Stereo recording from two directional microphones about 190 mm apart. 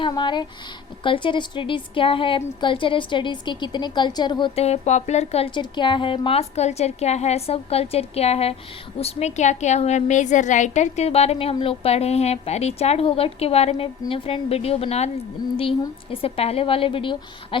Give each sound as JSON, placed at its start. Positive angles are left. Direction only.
{"t": 0.0, "sound": "a woman's voice", "side_deg": 25}